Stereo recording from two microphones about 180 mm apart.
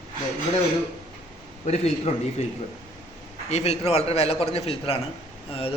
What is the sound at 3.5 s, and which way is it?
Speech, 35° left (ahead or behind).